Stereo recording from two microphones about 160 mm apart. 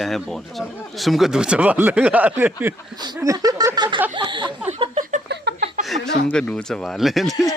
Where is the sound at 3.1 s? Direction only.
20° right (ahead or behind).